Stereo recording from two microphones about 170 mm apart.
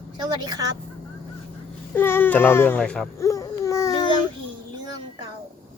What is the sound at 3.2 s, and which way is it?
Babbling, 20° left (ahead or behind).